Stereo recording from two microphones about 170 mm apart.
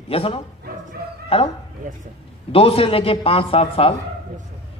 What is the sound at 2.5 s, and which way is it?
Speech, 35° left (ahead or behind).